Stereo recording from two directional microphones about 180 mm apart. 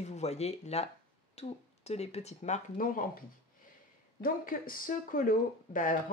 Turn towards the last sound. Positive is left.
turn(degrees=50)  # may be behind; listen again after turning